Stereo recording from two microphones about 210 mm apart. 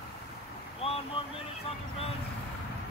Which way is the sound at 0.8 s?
30° left (ahead or behind).